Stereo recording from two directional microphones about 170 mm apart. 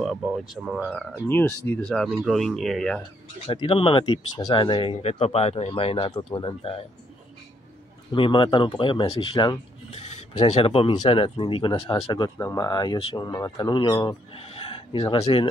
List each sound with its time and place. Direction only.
0.0 s speech: 5° right (ahead or behind)
1.2 s speech: 10° left (ahead or behind)
3.4 s speech: 30° left (ahead or behind)
8.1 s speech: 30° left (ahead or behind)
9.8 s speech: 40° left (ahead or behind)